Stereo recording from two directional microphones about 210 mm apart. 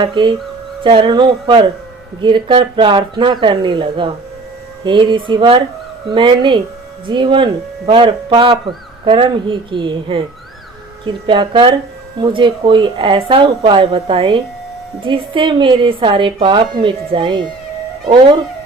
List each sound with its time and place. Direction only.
0.0 s speech: 20° right (ahead or behind)